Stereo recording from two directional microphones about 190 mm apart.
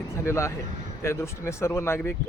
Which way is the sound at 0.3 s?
15° left (ahead or behind).